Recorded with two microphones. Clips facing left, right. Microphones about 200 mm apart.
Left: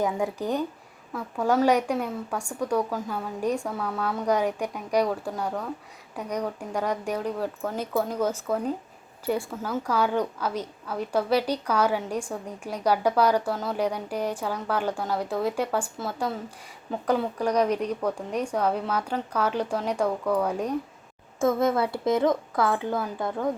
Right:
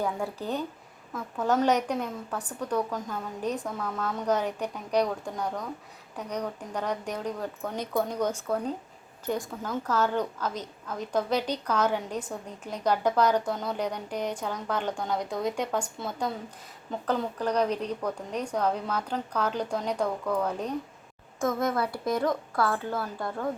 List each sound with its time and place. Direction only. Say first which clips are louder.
0.0 s a woman's voice: left 4 dB; 15° left (ahead or behind)
21.3 s a woman's voice: left 4 dB; 25° left (ahead or behind)